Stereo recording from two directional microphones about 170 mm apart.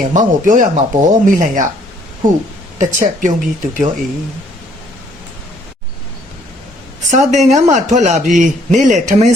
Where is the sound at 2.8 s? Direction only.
45° right (ahead or behind).